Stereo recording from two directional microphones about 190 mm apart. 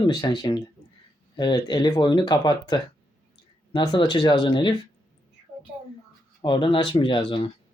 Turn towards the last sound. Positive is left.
turn(degrees=25)  # may be behind; listen again after turning